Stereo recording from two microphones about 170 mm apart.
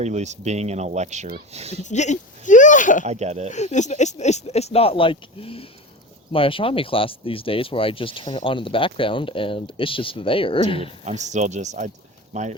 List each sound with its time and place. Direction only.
0.0 s speech: 40° right (ahead or behind)
1.8 s speech: 45° left (ahead or behind)
3.0 s speech: 40° right (ahead or behind)
3.5 s speech: 45° left (ahead or behind)
11.0 s speech: 45° right (ahead or behind)